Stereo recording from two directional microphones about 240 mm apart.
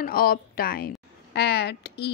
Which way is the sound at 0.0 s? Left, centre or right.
Left.